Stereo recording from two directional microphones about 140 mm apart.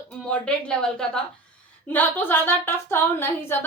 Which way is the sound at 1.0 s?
5° left (ahead or behind).